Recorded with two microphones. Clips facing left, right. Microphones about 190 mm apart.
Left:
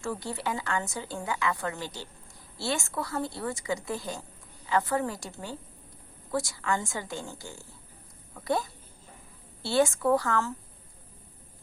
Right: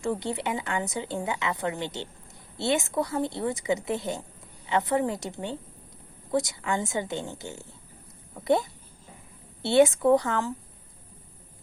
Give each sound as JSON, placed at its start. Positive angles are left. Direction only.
{"t": 0.0, "sound": "a woman's voice", "side_deg": -20}